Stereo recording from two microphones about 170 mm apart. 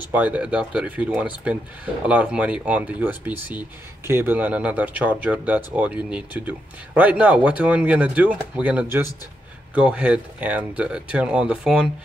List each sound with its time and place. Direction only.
0.1 s speech: 10° right (ahead or behind)